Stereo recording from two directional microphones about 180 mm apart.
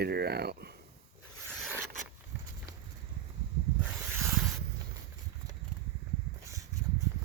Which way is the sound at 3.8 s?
10° right (ahead or behind).